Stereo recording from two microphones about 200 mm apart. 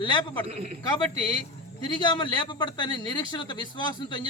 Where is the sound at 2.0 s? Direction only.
20° left (ahead or behind).